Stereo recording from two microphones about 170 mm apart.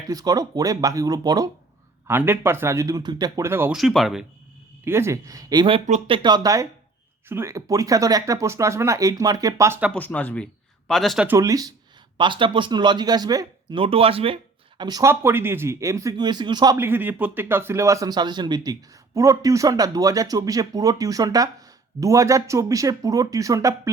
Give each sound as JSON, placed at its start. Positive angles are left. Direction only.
{"t": 0.1, "sound": "a man's voice", "side_deg": -20}
{"t": 3.8, "sound": "speech", "side_deg": 0}
{"t": 4.9, "sound": "a man's voice", "side_deg": -15}
{"t": 9.9, "sound": "speech", "side_deg": 10}
{"t": 11.3, "sound": "a man's voice", "side_deg": -20}
{"t": 14.8, "sound": "speech", "side_deg": -25}
{"t": 16.7, "sound": "a man's voice", "side_deg": -15}